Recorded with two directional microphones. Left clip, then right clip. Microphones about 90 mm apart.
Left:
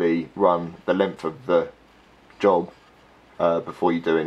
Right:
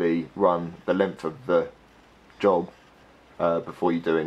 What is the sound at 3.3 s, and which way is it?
Speech, 5° left (ahead or behind).